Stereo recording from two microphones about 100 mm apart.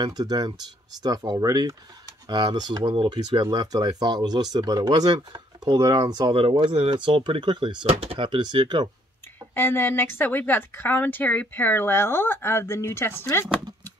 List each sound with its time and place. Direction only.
0.0 s speech: 45° right (ahead or behind)
2.2 s speech: 50° right (ahead or behind)
7.9 s speech: 65° right (ahead or behind); by 8.8 s 50° right (ahead or behind)
9.5 s a woman's voice: 20° left (ahead or behind)